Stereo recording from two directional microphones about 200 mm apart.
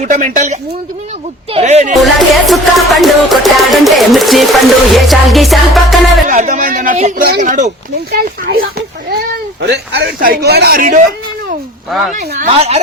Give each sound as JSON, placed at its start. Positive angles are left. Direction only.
{"t": 0.0, "sound": "speech", "side_deg": -40}
{"t": 1.9, "sound": "music", "side_deg": 0}
{"t": 6.2, "sound": "speech", "side_deg": -40}
{"t": 8.1, "sound": "a man's voice", "side_deg": -50}
{"t": 11.9, "sound": "music", "side_deg": 0}
{"t": 12.5, "sound": "speech", "side_deg": -30}